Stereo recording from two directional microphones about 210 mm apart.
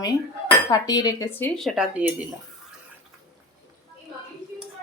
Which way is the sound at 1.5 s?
Centre (ahead or behind).